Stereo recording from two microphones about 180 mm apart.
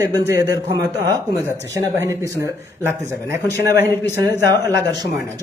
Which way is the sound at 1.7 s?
15° right (ahead or behind).